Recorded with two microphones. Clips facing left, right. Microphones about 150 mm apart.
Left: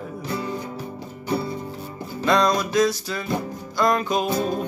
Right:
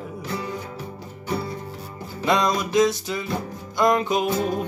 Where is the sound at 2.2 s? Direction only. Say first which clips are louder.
Left 2 dB; 20° right (ahead or behind).